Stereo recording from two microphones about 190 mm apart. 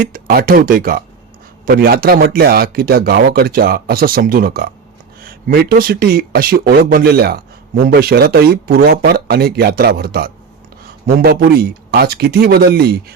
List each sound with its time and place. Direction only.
0.0 s speech: 50° right (ahead or behind)